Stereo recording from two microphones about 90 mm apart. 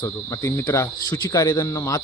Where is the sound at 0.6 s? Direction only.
25° left (ahead or behind).